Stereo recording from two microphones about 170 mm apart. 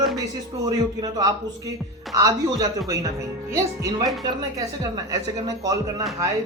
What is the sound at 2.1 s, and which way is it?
Speech, 20° right (ahead or behind).